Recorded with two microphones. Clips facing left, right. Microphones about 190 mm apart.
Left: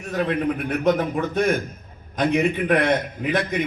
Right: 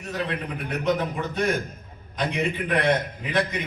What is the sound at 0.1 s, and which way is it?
A man's voice, 50° left (ahead or behind).